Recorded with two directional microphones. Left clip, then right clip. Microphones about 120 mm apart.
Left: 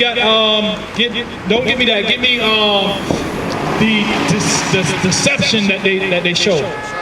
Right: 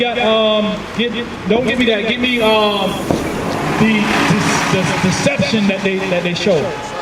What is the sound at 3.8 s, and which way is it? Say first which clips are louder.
Speech: right 1 dB; 45° right (ahead or behind).